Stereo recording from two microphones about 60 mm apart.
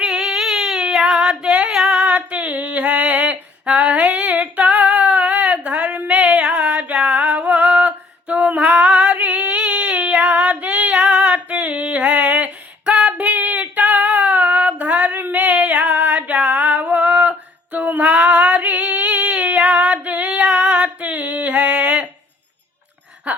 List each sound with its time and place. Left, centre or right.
0.0 s child singing: centre
15.2 s female singing: right